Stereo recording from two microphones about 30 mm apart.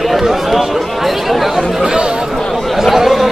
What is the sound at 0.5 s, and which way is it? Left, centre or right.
Chatter, centre.